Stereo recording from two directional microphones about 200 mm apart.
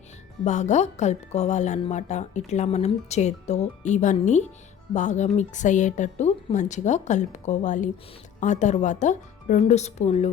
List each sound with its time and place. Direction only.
0.4 s speech: 35° left (ahead or behind)